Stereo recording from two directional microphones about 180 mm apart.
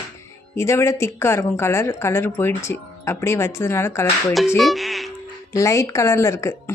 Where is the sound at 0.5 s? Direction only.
15° left (ahead or behind).